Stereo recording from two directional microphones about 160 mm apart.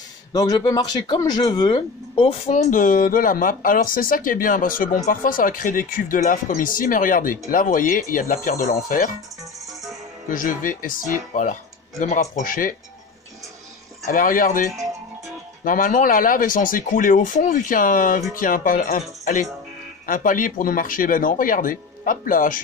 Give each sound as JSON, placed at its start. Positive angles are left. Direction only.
{"t": 0.3, "sound": "speech", "side_deg": 25}
{"t": 10.3, "sound": "speech", "side_deg": 60}
{"t": 14.0, "sound": "speech", "side_deg": 55}